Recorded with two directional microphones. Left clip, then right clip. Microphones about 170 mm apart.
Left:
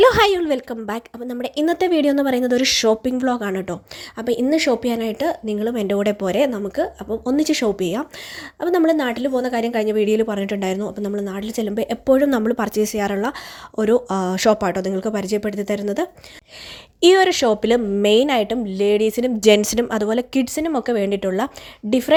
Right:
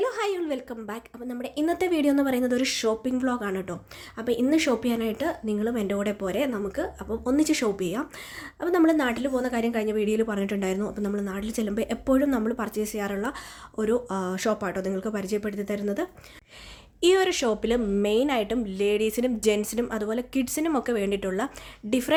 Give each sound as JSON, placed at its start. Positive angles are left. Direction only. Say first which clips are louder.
{"t": 0.0, "sound": "a woman's voice", "louder": "left 13 dB", "side_deg": 50}
{"t": 19.5, "sound": "a woman's voice", "louder": "left 13 dB", "side_deg": 40}